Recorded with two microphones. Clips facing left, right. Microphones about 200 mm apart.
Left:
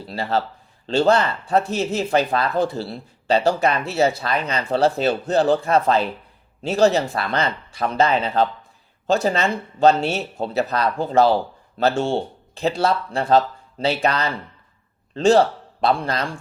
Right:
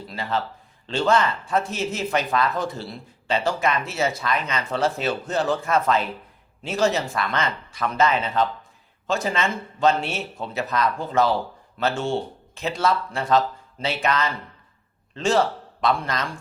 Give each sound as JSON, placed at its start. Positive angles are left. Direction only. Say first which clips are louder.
{"t": 0.0, "sound": "a man's voice", "louder": "left 4 dB", "side_deg": 30}